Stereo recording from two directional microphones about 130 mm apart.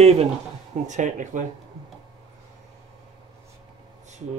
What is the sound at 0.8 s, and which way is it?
Speech, 70° right (ahead or behind).